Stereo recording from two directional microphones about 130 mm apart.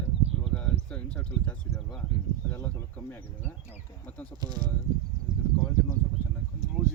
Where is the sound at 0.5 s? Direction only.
5° left (ahead or behind).